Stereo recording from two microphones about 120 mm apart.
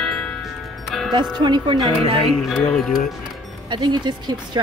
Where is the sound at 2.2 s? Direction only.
Centre (ahead or behind).